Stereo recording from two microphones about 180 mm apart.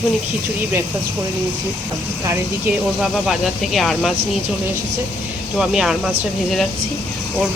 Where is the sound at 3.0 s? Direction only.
Centre (ahead or behind).